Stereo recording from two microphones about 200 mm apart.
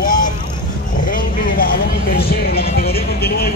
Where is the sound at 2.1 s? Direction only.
50° left (ahead or behind).